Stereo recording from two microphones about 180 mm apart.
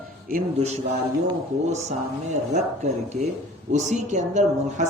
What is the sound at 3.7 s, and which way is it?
A man's voice, 40° right (ahead or behind).